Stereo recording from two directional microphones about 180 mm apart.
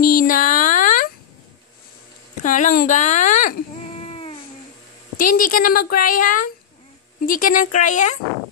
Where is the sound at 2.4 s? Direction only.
45° left (ahead or behind).